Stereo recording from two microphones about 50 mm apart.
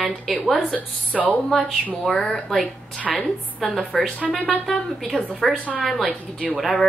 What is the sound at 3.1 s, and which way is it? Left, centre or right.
Speech, centre.